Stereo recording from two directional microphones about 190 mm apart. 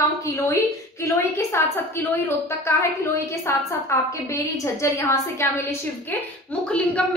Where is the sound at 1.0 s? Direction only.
15° left (ahead or behind).